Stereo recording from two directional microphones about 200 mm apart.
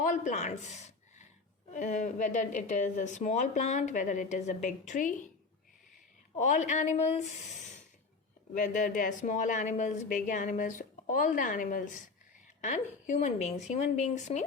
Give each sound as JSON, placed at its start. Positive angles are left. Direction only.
{"t": 0.0, "sound": "a sound", "side_deg": 40}
{"t": 1.7, "sound": "speech", "side_deg": 40}
{"t": 6.3, "sound": "speech", "side_deg": 35}